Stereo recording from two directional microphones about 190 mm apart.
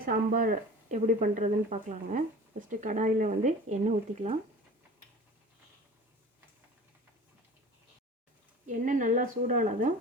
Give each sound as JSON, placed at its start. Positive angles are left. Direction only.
{"t": 0.0, "sound": "speech", "side_deg": -45}
{"t": 8.6, "sound": "a woman's voice", "side_deg": -45}